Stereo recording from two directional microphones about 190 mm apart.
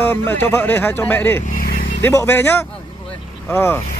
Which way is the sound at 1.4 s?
45° left (ahead or behind).